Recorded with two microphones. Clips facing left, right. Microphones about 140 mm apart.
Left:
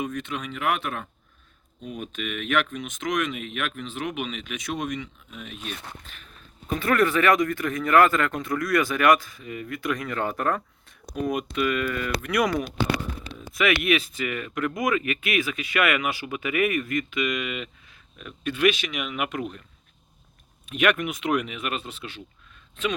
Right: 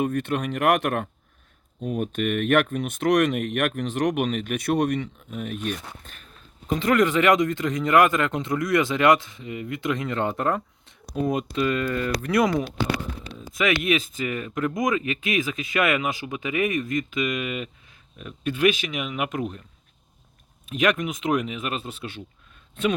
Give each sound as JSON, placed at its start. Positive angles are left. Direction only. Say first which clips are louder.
{"t": 0.0, "sound": "speech", "louder": "right 6 dB", "side_deg": -60}
{"t": 1.8, "sound": "speech", "louder": "right 8 dB", "side_deg": -55}
{"t": 6.7, "sound": "speech", "louder": "right 2 dB", "side_deg": -20}
{"t": 18.9, "sound": "speech", "louder": "right 1 dB", "side_deg": -25}
{"t": 21.0, "sound": "speech", "louder": "right 1 dB", "side_deg": -20}